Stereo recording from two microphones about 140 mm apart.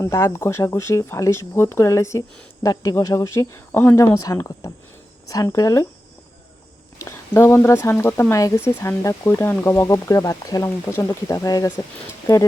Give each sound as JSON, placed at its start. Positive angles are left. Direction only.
{"t": 0.0, "sound": "speech", "side_deg": 20}
{"t": 7.0, "sound": "speech", "side_deg": 20}